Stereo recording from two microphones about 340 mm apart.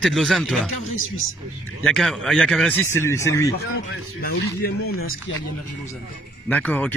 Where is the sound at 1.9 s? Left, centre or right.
Centre.